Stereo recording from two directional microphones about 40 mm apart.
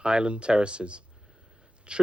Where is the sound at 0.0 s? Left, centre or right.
Right.